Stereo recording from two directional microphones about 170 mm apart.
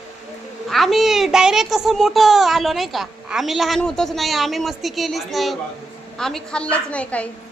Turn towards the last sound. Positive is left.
turn(degrees=5)  # may be behind; listen again after turning